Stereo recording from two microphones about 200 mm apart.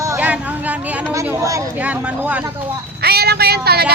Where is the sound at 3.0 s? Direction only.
50° right (ahead or behind).